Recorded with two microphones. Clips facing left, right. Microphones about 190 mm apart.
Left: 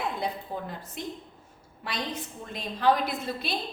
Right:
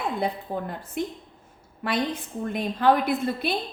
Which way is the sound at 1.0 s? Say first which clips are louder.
Right 8 dB; 55° right (ahead or behind).